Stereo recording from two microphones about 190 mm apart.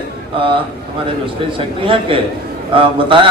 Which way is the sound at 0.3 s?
25° right (ahead or behind).